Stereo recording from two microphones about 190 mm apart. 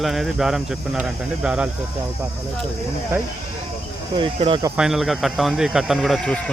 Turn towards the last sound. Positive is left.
turn(degrees=0)  # may be behind; listen again after turning